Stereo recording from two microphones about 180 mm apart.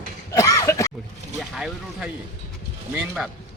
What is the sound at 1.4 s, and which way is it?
A man's voice, centre (ahead or behind).